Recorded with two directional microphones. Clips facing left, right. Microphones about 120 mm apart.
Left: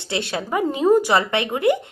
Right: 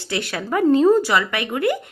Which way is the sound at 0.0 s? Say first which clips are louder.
Left 1 dB; 25° left (ahead or behind).